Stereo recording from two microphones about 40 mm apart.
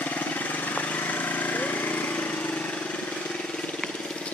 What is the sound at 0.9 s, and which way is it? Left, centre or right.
Lawn mower, left.